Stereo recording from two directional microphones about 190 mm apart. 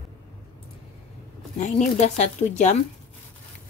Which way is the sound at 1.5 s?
40° left (ahead or behind).